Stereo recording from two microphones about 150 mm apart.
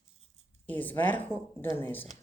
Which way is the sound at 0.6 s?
10° left (ahead or behind).